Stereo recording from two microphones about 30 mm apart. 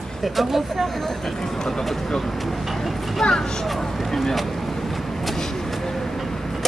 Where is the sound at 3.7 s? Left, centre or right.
Centre.